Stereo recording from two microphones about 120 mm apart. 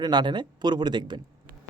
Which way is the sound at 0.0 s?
35° right (ahead or behind).